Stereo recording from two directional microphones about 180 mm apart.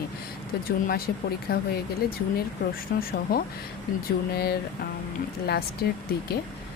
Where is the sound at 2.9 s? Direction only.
65° left (ahead or behind).